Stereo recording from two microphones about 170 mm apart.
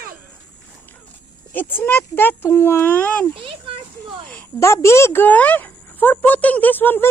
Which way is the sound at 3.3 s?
30° right (ahead or behind).